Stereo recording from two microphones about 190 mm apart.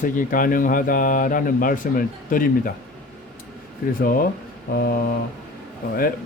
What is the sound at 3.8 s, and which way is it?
Speech, 50° left (ahead or behind).